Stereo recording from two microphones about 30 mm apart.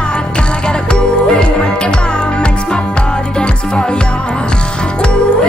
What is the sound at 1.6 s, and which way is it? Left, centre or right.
Music, left.